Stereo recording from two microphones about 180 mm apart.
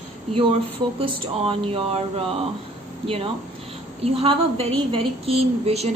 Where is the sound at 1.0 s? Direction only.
30° right (ahead or behind).